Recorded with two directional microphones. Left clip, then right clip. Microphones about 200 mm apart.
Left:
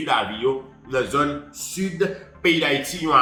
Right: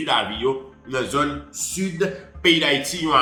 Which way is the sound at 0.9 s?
10° right (ahead or behind).